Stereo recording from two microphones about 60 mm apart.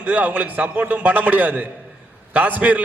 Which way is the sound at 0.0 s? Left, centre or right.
Right.